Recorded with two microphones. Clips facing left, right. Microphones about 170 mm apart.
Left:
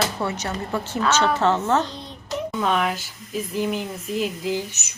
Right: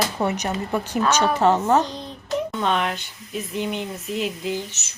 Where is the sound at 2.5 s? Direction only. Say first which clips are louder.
Left 4 dB; centre (ahead or behind).